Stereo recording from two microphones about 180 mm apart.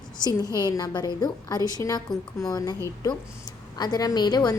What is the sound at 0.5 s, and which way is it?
A woman's voice, 20° left (ahead or behind).